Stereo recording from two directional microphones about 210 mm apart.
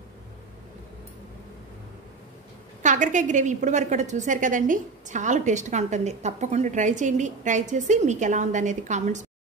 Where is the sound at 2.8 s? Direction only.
35° right (ahead or behind).